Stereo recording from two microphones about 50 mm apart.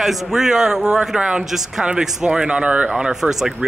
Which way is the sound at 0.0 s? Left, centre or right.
Centre.